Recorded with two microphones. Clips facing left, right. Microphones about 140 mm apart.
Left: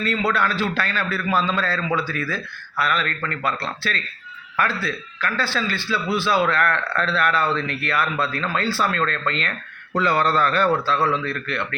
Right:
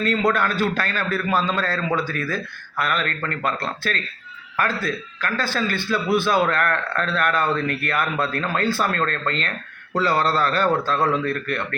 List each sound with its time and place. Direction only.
0.3 s a man's voice: 45° right (ahead or behind)